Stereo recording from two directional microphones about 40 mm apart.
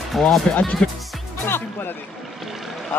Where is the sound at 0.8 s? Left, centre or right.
Left.